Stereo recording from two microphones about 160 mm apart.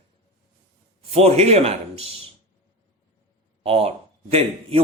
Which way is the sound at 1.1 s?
40° right (ahead or behind).